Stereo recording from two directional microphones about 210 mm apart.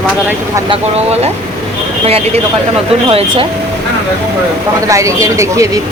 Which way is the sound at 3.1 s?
25° right (ahead or behind).